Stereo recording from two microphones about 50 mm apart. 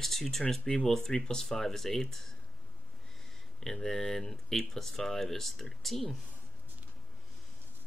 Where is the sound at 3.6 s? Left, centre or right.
Centre.